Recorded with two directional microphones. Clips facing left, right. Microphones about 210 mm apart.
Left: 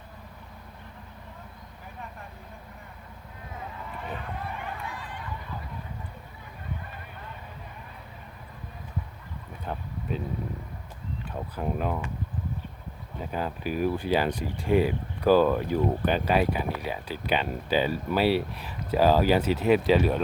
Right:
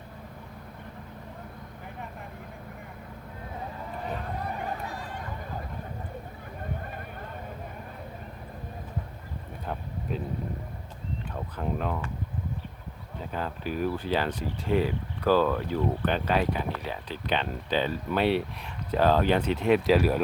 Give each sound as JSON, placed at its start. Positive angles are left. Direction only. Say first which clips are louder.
{"t": 4.4, "sound": "a sound", "louder": "right 3 dB", "side_deg": -40}
{"t": 10.1, "sound": "speech", "louder": "left 1 dB", "side_deg": 0}
{"t": 11.5, "sound": "speech", "louder": "left 1 dB", "side_deg": 10}
{"t": 13.3, "sound": "speech", "louder": "left 2 dB", "side_deg": 10}